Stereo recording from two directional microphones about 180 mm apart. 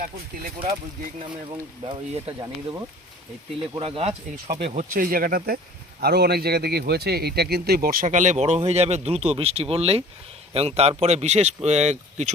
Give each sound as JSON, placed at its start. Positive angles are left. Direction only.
{"t": 1.9, "sound": "a man's voice", "side_deg": -35}
{"t": 2.4, "sound": "a man's voice", "side_deg": -20}